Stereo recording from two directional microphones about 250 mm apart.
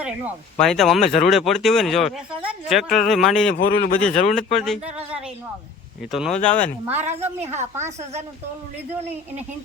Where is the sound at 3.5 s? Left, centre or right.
Left.